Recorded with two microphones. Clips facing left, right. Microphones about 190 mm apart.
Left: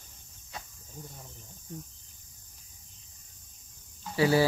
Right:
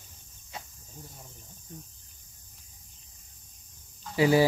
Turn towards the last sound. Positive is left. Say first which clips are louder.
# right 2 dB
turn(degrees=-15)  # may be behind; listen again after turning